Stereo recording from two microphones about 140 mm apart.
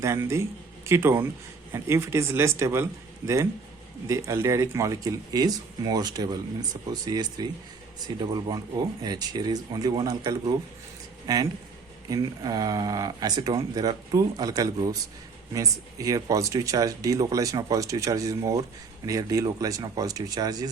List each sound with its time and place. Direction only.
0.0 s speech: 20° right (ahead or behind)
4.0 s speech: 20° right (ahead or behind)